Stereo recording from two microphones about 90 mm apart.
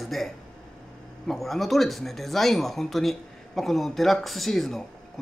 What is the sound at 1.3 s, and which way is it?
Speech, centre (ahead or behind).